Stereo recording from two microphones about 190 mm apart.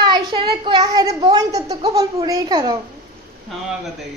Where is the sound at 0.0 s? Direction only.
25° right (ahead or behind).